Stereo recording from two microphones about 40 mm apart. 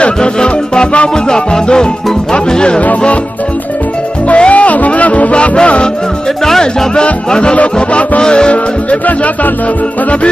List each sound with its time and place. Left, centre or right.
0.0 s music: left
4.4 s music: left
5.3 s music: left
7.2 s music: left
7.5 s music: left
8.2 s music: left
9.0 s music: left